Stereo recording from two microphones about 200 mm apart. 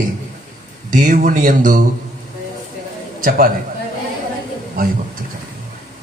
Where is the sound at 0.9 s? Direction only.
40° right (ahead or behind).